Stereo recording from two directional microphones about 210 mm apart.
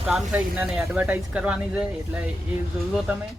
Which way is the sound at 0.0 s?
Centre (ahead or behind).